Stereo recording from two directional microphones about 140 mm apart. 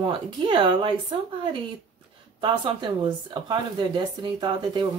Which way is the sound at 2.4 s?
35° right (ahead or behind).